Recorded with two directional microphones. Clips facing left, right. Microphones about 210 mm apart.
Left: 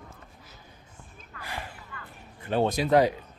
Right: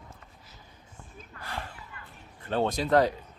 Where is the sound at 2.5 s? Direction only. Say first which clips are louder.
Left 2 dB; 10° left (ahead or behind).